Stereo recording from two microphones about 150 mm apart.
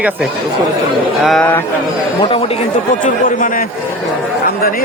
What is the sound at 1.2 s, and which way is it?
Music, 5° left (ahead or behind).